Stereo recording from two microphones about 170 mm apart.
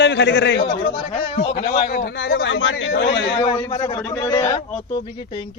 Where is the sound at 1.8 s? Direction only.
70° left (ahead or behind); by 3.3 s 90° left.